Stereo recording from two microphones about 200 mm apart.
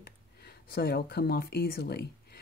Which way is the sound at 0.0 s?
50° left (ahead or behind).